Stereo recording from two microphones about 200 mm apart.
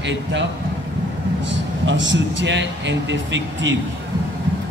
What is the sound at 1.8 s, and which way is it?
A man's voice, 70° right (ahead or behind).